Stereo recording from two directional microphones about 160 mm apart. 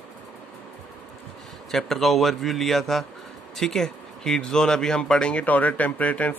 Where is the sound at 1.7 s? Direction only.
Centre (ahead or behind).